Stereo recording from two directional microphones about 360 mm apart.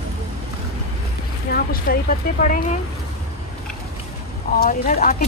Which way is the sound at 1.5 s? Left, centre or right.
Left.